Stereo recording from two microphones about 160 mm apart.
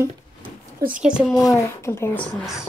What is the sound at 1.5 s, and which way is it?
Speech, 15° left (ahead or behind).